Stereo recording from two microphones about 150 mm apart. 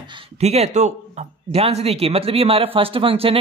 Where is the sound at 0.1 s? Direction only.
45° right (ahead or behind).